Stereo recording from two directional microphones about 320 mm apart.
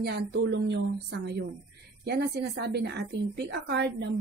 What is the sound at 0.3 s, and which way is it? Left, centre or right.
A woman's voice, right.